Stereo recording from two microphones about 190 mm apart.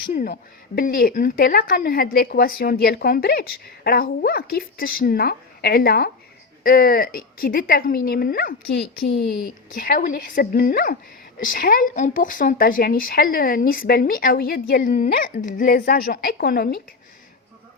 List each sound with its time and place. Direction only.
0.8 s a woman's voice: 50° left (ahead or behind)